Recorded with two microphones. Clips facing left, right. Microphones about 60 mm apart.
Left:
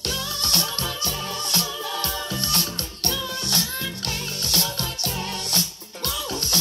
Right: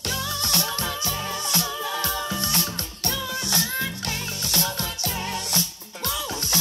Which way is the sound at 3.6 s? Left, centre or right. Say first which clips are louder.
Right 3 dB; right.